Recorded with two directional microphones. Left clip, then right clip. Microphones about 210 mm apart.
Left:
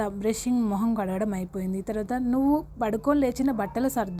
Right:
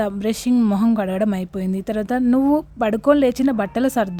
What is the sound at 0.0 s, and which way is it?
A woman's voice, 25° right (ahead or behind).